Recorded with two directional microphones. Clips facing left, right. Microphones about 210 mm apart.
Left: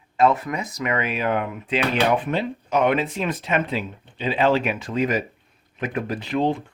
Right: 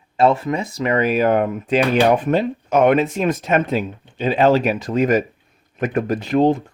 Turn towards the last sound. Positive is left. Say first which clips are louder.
# right 6 dB
turn(degrees=-45)  # may be behind; listen again after turning